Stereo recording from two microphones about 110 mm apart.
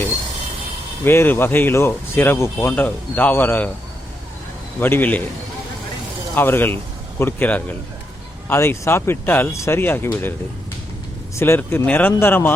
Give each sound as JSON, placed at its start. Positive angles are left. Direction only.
{"t": 1.0, "sound": "speech", "side_deg": 20}
{"t": 4.8, "sound": "a man's voice", "side_deg": 20}
{"t": 6.3, "sound": "a man's voice", "side_deg": 20}
{"t": 8.4, "sound": "speech", "side_deg": 25}
{"t": 11.3, "sound": "speech", "side_deg": 25}